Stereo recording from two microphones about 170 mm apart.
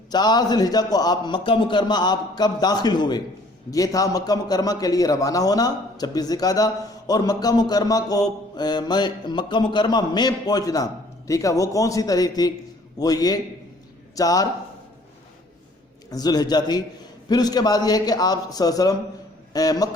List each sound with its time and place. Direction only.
0.1 s mantra: 25° left (ahead or behind)
16.0 s mantra: 20° left (ahead or behind)